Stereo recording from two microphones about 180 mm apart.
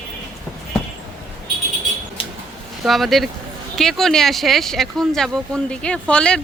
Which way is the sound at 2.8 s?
Centre (ahead or behind).